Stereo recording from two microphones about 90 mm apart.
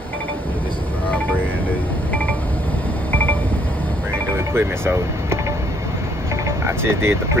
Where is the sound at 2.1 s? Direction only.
15° left (ahead or behind).